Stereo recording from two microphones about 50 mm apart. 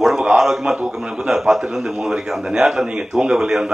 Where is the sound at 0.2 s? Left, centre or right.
Centre.